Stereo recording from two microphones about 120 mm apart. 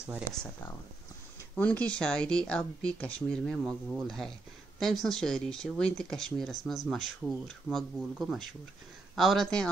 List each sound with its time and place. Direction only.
1.6 s speech: 10° left (ahead or behind)